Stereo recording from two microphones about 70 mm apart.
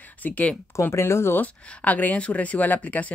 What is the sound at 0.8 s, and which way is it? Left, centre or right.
Speech, left.